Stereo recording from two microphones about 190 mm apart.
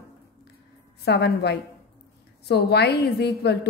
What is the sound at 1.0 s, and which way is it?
A woman's voice, 60° left (ahead or behind).